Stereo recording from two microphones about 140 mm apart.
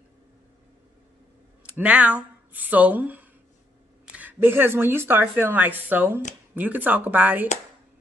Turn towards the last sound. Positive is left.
turn(degrees=-10)  # may be behind; listen again after turning